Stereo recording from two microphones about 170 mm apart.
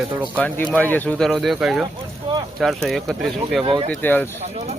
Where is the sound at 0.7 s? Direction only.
10° left (ahead or behind).